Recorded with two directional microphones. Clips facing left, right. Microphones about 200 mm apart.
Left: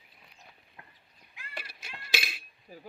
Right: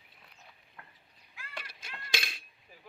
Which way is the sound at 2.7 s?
35° left (ahead or behind).